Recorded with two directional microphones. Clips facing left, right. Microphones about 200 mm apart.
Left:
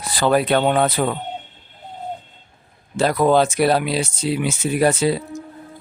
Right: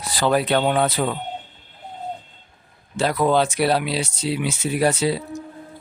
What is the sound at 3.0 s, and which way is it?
Speech, 45° left (ahead or behind).